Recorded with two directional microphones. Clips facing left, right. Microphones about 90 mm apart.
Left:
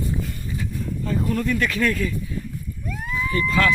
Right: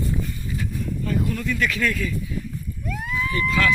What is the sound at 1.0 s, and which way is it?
Speech, 35° left (ahead or behind).